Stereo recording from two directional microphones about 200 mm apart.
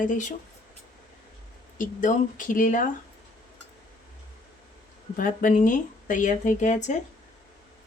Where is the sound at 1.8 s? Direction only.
40° left (ahead or behind).